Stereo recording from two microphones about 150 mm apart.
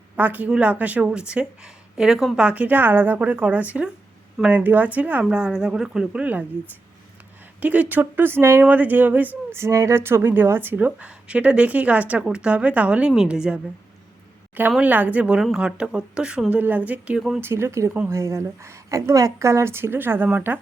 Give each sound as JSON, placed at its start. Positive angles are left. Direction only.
{"t": 0.2, "sound": "speech", "side_deg": -10}
{"t": 7.6, "sound": "speech", "side_deg": -10}
{"t": 14.7, "sound": "speech", "side_deg": -10}
{"t": 17.4, "sound": "a woman's voice", "side_deg": -15}